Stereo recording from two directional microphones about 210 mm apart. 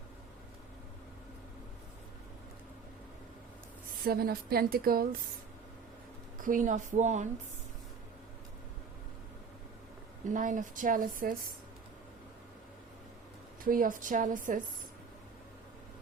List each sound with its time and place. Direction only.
4.0 s a woman's voice: 45° right (ahead or behind)
6.4 s speech: 40° right (ahead or behind)
10.2 s speech: 35° right (ahead or behind)
13.7 s speech: 40° right (ahead or behind)